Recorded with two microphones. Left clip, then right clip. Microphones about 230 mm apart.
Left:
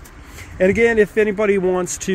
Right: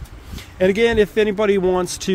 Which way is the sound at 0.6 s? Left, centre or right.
Centre.